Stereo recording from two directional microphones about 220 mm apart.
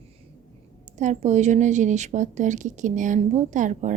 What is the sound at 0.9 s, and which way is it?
A woman's voice, 30° right (ahead or behind).